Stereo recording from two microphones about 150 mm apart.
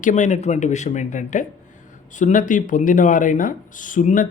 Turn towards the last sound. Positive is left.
turn(degrees=60)  # may be behind; listen again after turning